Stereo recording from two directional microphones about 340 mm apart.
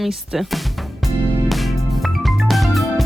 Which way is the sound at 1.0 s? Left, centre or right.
Centre.